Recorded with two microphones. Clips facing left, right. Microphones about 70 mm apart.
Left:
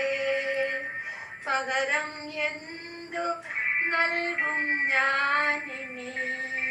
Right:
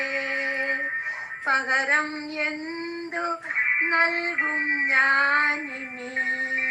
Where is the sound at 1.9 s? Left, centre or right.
Right.